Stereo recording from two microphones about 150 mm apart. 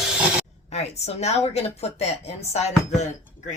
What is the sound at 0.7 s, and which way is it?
Speech, 45° left (ahead or behind).